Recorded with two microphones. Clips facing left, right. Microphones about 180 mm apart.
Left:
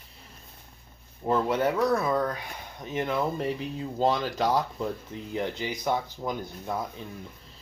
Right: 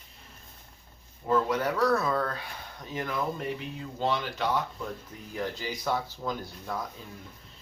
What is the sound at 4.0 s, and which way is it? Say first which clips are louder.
Speech: left 4 dB; 40° left (ahead or behind).